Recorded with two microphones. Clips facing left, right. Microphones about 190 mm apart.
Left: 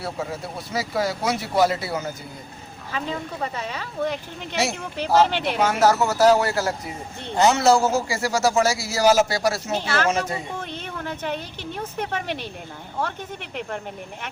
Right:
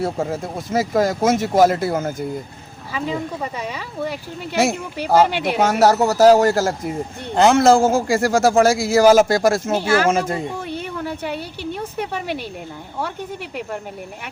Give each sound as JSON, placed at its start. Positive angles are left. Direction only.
{"t": 0.0, "sound": "speech", "side_deg": -45}
{"t": 2.9, "sound": "a woman's voice", "side_deg": -10}
{"t": 4.5, "sound": "speech", "side_deg": -50}
{"t": 5.3, "sound": "a woman's voice", "side_deg": -10}
{"t": 5.5, "sound": "speech", "side_deg": -45}
{"t": 9.7, "sound": "a woman's voice", "side_deg": -10}
{"t": 10.1, "sound": "speech", "side_deg": -50}
{"t": 10.6, "sound": "a woman's voice", "side_deg": -10}